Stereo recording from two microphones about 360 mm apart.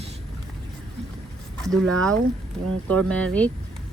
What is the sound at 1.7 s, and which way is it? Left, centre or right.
Speech, centre.